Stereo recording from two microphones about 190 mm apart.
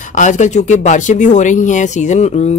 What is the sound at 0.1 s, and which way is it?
Speech, 40° left (ahead or behind).